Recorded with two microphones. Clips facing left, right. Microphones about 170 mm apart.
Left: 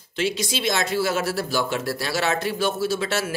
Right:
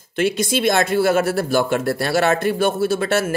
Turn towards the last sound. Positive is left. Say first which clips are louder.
# right 5 dB
turn(degrees=-55)  # may be behind; listen again after turning